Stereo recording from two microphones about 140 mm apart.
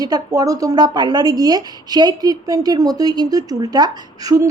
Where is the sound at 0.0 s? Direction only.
25° right (ahead or behind).